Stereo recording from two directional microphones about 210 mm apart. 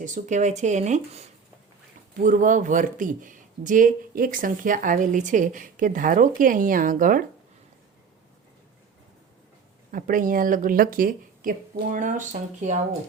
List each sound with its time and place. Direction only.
0.0 s speech: 35° right (ahead or behind)
9.9 s speech: 40° right (ahead or behind)